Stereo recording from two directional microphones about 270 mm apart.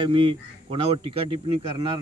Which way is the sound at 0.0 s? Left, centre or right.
Centre.